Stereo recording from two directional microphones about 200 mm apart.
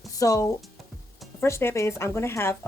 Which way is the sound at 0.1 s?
15° left (ahead or behind).